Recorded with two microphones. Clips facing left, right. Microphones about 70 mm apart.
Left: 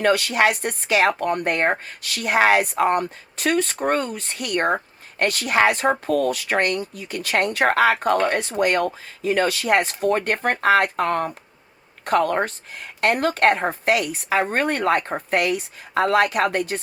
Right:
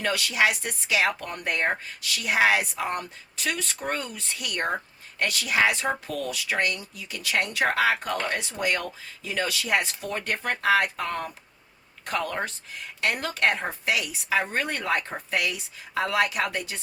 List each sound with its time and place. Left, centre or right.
0.0 s speech: left